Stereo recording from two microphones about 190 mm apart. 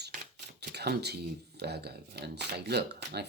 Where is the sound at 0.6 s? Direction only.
60° right (ahead or behind).